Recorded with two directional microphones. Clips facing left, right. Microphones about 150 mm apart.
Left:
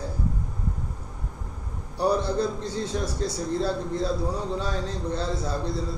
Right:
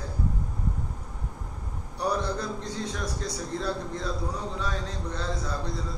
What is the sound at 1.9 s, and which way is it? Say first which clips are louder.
A man's voice: left 5 dB; 30° left (ahead or behind).